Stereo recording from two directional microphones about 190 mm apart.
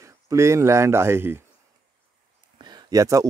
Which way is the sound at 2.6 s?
20° right (ahead or behind).